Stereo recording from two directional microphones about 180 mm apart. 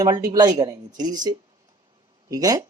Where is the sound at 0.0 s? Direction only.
25° right (ahead or behind).